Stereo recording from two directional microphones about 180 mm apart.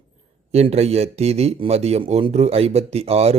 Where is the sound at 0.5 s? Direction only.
35° right (ahead or behind).